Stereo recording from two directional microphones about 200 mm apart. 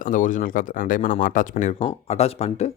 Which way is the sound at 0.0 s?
40° left (ahead or behind).